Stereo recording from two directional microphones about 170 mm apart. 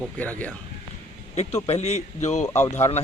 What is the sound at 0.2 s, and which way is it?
Speech, 10° left (ahead or behind).